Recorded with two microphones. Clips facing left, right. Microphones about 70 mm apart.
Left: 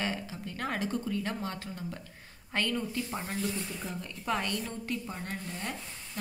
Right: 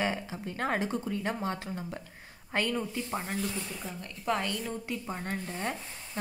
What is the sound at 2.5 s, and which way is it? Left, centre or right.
Speech, centre.